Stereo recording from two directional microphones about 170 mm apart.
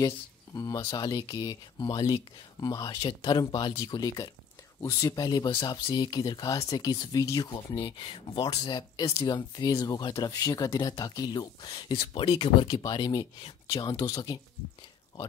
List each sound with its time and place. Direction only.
0.6 s speech: 25° left (ahead or behind)